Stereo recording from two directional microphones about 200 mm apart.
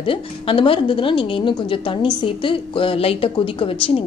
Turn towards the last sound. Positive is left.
turn(degrees=25)  # may be behind; listen again after turning